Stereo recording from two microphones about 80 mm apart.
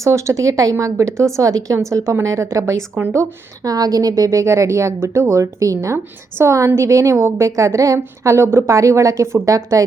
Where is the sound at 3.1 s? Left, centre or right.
Right.